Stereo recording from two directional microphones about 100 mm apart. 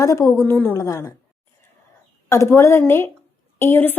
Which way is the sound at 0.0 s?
35° left (ahead or behind).